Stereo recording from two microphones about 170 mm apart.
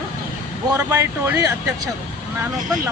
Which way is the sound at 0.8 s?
15° right (ahead or behind).